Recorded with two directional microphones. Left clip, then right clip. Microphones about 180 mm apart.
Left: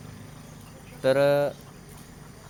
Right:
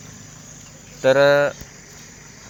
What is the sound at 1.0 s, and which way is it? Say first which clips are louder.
Speech: right 7 dB; 30° right (ahead or behind).